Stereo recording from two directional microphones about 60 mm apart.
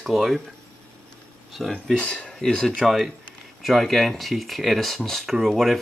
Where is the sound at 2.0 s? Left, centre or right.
Centre.